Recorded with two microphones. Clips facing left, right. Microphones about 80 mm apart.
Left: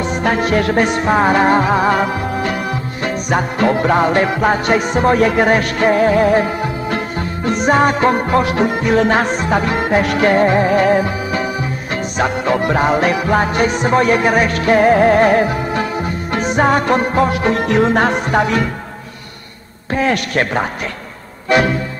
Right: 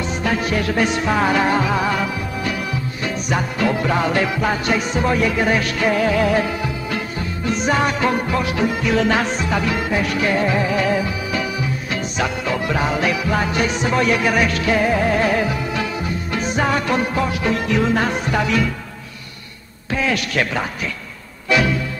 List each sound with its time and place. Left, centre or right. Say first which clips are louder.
0.0 s music: left 5 dB; left
16.6 s music: left 6 dB; left
19.9 s a man's voice: left 4 dB; left
21.5 s music: left 4 dB; left